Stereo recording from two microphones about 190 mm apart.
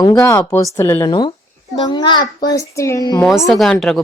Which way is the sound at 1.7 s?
20° left (ahead or behind).